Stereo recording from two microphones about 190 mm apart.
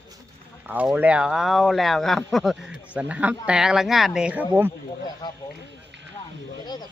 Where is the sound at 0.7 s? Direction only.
10° right (ahead or behind).